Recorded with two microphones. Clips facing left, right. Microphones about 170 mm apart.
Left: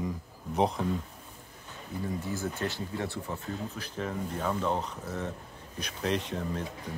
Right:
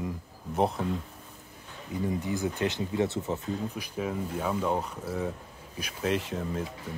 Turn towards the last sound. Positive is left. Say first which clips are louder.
# right 1 dB
turn(degrees=-5)  # may be behind; listen again after turning